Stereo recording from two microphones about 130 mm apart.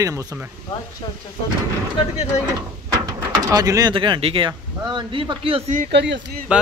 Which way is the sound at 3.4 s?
25° right (ahead or behind).